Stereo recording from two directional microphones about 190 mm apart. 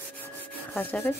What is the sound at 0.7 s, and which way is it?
Speech, 10° left (ahead or behind).